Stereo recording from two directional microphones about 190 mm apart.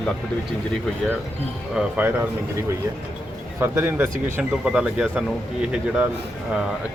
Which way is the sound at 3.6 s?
10° right (ahead or behind).